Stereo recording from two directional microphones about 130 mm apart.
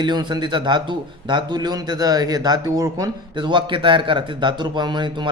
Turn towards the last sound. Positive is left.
turn(degrees=-35)  # may be behind; listen again after turning